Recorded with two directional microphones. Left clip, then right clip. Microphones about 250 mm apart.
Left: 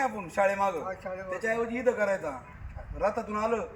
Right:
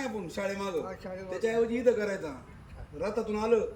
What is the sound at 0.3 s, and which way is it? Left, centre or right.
A man's voice, centre.